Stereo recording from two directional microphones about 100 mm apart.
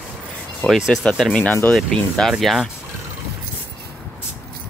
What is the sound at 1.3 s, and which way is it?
Speech, 20° left (ahead or behind).